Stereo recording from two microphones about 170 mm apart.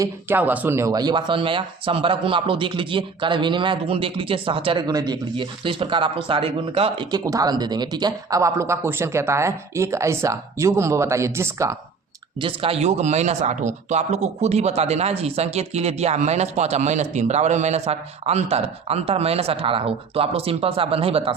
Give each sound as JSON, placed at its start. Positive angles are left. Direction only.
{"t": 0.0, "sound": "speech", "side_deg": -10}
{"t": 12.4, "sound": "speech", "side_deg": -30}